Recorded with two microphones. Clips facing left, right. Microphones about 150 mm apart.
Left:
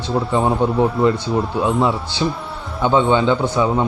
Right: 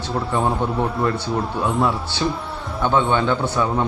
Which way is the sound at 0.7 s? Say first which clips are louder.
Left 5 dB; centre (ahead or behind).